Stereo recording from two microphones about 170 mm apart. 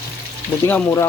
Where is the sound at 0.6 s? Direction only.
15° left (ahead or behind).